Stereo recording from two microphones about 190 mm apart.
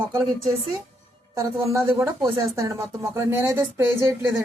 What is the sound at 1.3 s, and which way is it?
Speech, 15° right (ahead or behind).